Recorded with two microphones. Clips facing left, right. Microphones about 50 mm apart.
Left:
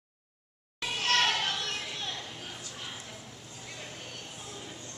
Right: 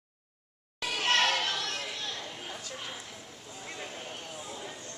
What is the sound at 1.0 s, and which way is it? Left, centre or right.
Children playing, right.